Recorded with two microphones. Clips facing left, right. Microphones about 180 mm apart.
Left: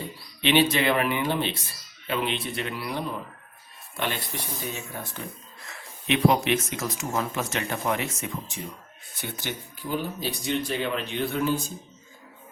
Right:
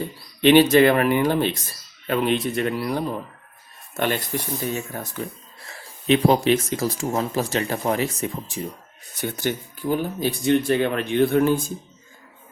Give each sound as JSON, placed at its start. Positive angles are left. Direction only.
{"t": 0.4, "sound": "speech", "side_deg": -45}
{"t": 5.6, "sound": "speech", "side_deg": -30}